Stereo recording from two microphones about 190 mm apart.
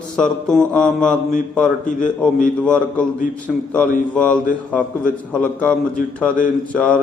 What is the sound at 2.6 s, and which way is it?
Mantra, 5° left (ahead or behind).